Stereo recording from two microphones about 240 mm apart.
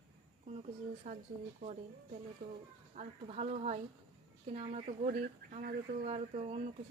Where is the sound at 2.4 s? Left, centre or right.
Right.